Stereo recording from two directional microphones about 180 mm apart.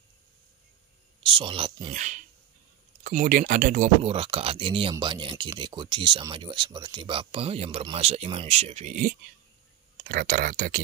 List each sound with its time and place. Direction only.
1.2 s speech: 30° right (ahead or behind)
1.9 s speech: 45° right (ahead or behind)
4.0 s speech: 35° right (ahead or behind)
10.0 s speech: 55° right (ahead or behind)